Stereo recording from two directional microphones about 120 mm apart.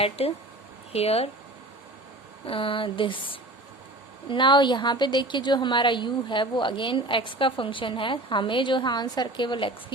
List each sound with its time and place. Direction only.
0.0 s speech: 55° left (ahead or behind)
2.5 s a woman's voice: 50° left (ahead or behind)